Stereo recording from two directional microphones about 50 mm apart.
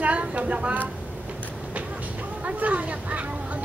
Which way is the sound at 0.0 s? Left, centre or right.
Right.